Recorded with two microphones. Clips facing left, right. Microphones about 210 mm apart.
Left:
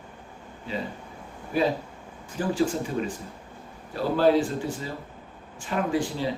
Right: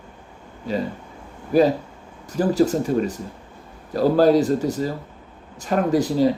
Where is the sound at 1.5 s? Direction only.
40° right (ahead or behind).